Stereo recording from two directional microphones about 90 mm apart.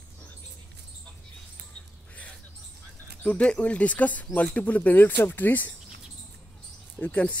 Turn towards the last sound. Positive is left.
turn(degrees=15)  # may be behind; listen again after turning